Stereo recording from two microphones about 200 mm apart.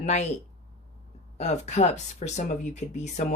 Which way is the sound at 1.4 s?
35° left (ahead or behind).